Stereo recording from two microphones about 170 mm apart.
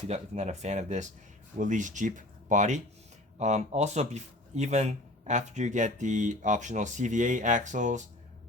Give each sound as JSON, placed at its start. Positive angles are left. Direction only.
{"t": 0.1, "sound": "speech", "side_deg": -40}